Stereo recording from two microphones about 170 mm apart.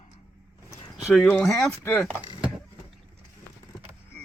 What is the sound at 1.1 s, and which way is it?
Speech, 5° left (ahead or behind).